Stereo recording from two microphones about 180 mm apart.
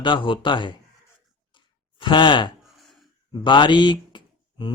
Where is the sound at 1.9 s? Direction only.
25° left (ahead or behind).